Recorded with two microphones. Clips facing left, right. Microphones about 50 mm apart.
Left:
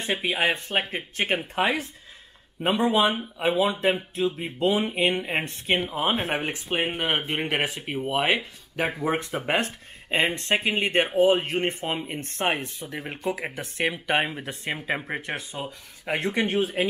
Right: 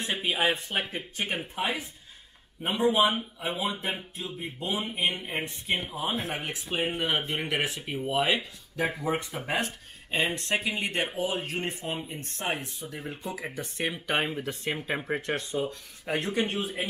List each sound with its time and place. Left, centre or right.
0.1 s speech: left
0.7 s speech: left
1.5 s speech: left
4.2 s speech: left
5.2 s speech: left
6.7 s speech: left
7.6 s speech: left
10.2 s speech: left
11.8 s speech: left
14.0 s speech: left
14.8 s speech: centre
16.1 s speech: left
16.4 s speech: left